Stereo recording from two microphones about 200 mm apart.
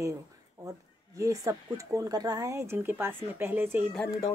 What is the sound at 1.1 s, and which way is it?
Speech, 15° right (ahead or behind).